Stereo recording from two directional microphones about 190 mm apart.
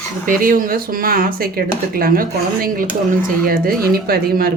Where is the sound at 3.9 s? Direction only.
50° right (ahead or behind).